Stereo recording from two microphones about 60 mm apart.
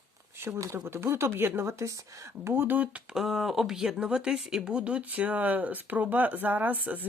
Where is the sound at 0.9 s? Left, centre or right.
Right.